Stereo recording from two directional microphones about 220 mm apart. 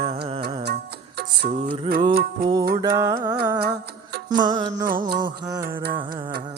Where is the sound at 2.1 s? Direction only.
40° right (ahead or behind).